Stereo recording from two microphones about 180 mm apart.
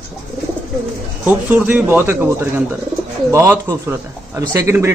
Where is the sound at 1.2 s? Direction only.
10° right (ahead or behind).